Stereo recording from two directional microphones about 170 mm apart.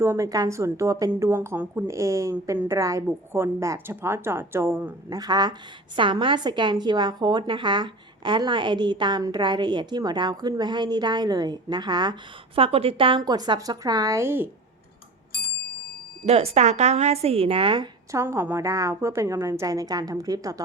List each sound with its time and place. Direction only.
0.0 s a woman's voice: 15° right (ahead or behind)
5.1 s a woman's voice: 25° right (ahead or behind)
16.2 s speech: 40° right (ahead or behind)
18.1 s a woman's voice: 15° right (ahead or behind)